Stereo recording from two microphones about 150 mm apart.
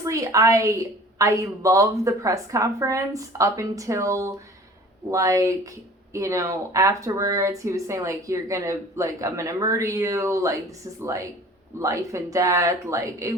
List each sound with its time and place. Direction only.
0.0 s speech: 20° right (ahead or behind)